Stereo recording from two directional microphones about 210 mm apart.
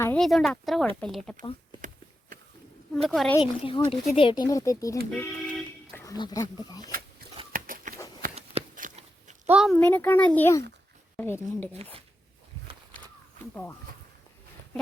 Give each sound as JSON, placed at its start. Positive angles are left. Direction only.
{"t": 0.0, "sound": "speech", "side_deg": 5}
{"t": 2.9, "sound": "speech", "side_deg": 0}
{"t": 3.3, "sound": "a woman's voice", "side_deg": 25}
{"t": 5.1, "sound": "vehicle horn", "side_deg": 10}
{"t": 7.5, "sound": "biting", "side_deg": -40}
{"t": 8.4, "sound": "a sound", "side_deg": -35}
{"t": 9.5, "sound": "speech", "side_deg": 0}
{"t": 11.7, "sound": "speech", "side_deg": -30}